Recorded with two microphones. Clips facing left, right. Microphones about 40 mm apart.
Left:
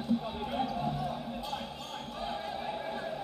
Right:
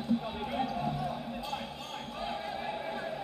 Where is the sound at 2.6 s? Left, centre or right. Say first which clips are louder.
Even; right.